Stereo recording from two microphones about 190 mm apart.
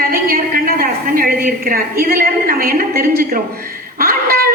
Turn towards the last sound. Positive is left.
turn(degrees=-50)  # may be behind; listen again after turning